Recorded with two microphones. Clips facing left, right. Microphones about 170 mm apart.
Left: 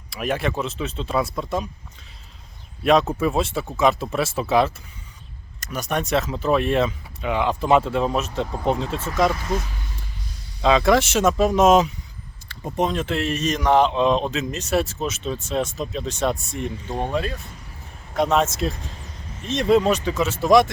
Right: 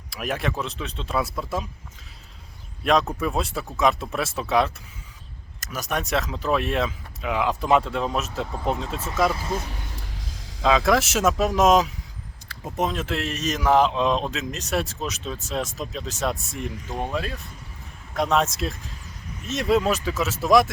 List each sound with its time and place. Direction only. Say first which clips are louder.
0.1 s speech: left 3 dB; centre (ahead or behind)
2.8 s speech: left 4 dB; centre (ahead or behind)
9.3 s speech: left 2 dB; 30° right (ahead or behind)
10.6 s speech: left 3 dB; centre (ahead or behind)